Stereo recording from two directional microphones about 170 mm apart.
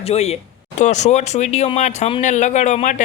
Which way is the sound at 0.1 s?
40° left (ahead or behind).